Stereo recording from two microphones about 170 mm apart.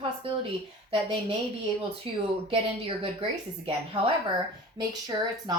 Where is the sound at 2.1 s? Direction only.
30° right (ahead or behind).